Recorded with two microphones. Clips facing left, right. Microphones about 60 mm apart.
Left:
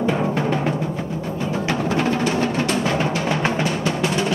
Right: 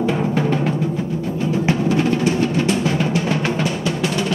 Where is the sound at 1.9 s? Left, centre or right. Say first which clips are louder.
Right 1 dB; left.